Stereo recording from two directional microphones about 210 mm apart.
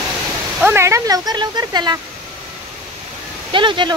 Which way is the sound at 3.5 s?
25° right (ahead or behind).